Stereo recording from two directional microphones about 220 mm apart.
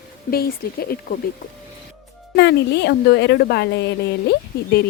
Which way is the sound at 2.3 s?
50° left (ahead or behind).